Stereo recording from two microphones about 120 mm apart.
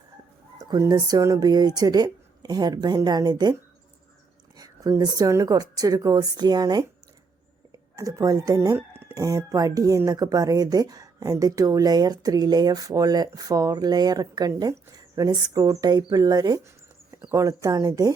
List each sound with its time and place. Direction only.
0.6 s speech: 30° right (ahead or behind)
4.5 s speech: 30° right (ahead or behind)
7.9 s speech: 30° right (ahead or behind)